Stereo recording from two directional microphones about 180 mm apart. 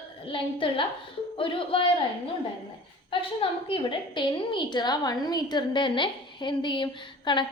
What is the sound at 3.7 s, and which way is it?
A woman's voice, 25° left (ahead or behind).